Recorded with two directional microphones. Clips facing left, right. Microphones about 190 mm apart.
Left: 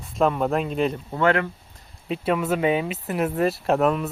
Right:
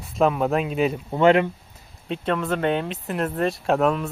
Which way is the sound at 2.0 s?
5° left (ahead or behind).